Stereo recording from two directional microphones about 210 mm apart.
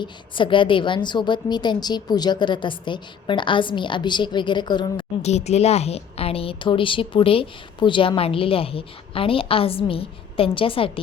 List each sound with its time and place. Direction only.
0.0 s a woman's voice: 25° left (ahead or behind)